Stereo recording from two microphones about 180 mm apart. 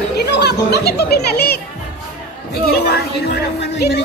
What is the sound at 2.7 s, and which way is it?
Speech, 65° left (ahead or behind).